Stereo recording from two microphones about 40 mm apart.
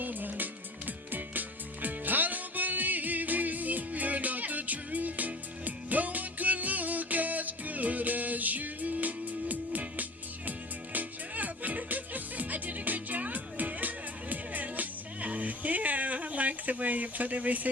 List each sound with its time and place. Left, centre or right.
0.0 s music: right